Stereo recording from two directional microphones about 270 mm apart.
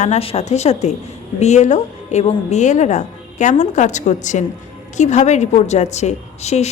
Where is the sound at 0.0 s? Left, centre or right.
Left.